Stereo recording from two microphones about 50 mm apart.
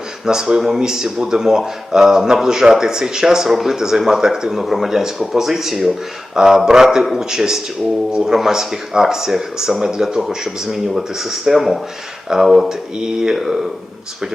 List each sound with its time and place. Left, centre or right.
0.3 s speech: centre